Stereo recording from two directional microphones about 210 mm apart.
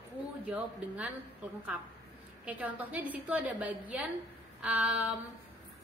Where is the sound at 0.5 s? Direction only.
5° right (ahead or behind).